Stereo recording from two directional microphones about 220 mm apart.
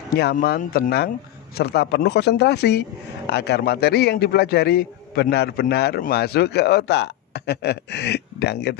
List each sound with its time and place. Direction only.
0.1 s a man's voice: 45° left (ahead or behind)